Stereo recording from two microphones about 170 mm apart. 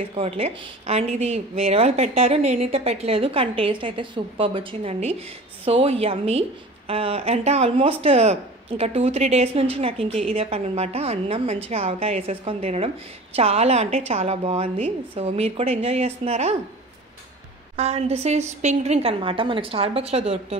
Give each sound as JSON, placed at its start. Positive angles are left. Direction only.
{"t": 0.1, "sound": "speech", "side_deg": -35}
{"t": 17.7, "sound": "speech", "side_deg": -40}